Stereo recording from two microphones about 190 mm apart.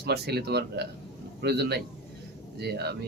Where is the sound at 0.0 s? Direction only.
60° right (ahead or behind).